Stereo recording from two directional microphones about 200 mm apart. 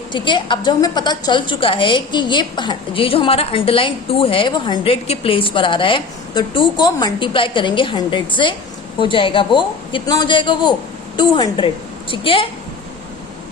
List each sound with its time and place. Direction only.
0.1 s a woman's voice: 25° left (ahead or behind)